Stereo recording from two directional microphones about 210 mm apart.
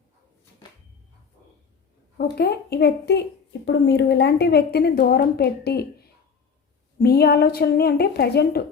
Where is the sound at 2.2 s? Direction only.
50° left (ahead or behind).